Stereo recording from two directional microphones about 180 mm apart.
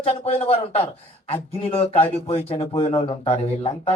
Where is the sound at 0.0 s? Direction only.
30° left (ahead or behind).